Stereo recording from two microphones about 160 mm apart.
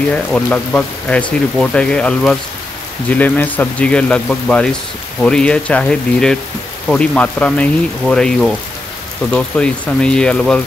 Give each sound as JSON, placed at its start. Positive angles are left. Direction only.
{"t": 0.1, "sound": "speech", "side_deg": 5}